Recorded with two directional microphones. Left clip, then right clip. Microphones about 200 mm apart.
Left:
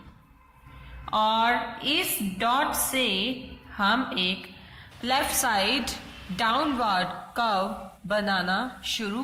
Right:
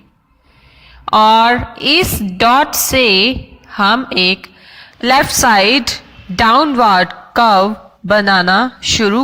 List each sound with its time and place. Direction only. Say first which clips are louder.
1.0 s a woman's voice: right 15 dB; 45° right (ahead or behind)